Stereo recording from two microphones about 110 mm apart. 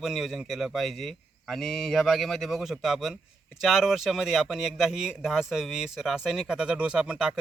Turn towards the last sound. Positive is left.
turn(degrees=-5)  # may be behind; listen again after turning